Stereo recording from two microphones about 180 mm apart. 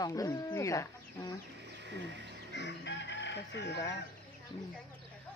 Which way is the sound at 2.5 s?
75° left (ahead or behind).